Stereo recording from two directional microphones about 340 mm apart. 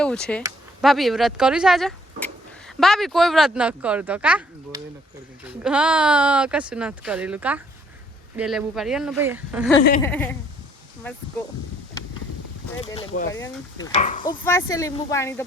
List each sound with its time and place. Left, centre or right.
0.0 s speech: centre
12.8 s speech: centre
14.4 s speech: centre